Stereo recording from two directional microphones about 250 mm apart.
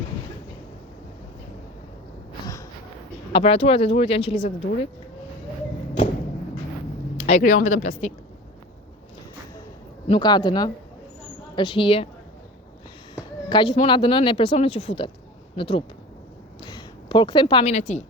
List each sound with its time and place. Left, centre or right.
3.3 s speech: left
7.2 s speech: left
10.1 s a man's voice: centre
13.1 s speech: centre